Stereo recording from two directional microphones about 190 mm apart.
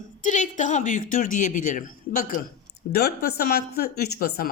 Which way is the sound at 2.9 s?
55° left (ahead or behind).